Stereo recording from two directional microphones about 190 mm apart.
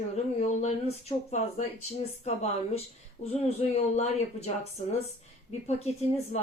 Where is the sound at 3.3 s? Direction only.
35° left (ahead or behind).